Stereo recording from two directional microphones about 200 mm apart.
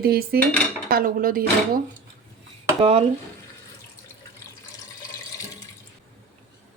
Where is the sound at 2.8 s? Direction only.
30° right (ahead or behind).